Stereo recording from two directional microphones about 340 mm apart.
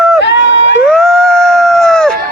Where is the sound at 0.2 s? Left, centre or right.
Left.